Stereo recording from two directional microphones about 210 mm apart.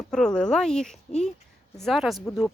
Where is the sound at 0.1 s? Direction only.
5° left (ahead or behind).